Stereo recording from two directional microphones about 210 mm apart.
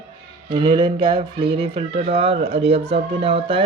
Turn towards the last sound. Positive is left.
turn(degrees=-25)  # may be behind; listen again after turning